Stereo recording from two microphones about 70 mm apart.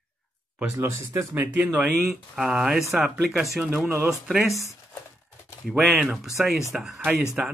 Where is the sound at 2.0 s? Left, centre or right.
Centre.